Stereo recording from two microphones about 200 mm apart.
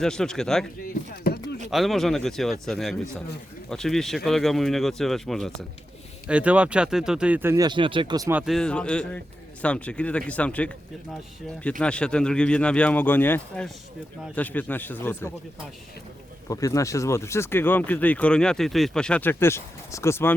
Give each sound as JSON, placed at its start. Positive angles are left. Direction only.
{"t": 0.0, "sound": "speech", "side_deg": 5}
{"t": 0.8, "sound": "a sound", "side_deg": 50}
{"t": 1.7, "sound": "speech", "side_deg": 0}
{"t": 11.8, "sound": "speech", "side_deg": 5}
{"t": 16.5, "sound": "speech", "side_deg": 15}